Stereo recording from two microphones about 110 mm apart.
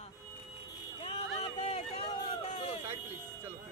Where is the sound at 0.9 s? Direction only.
65° left (ahead or behind).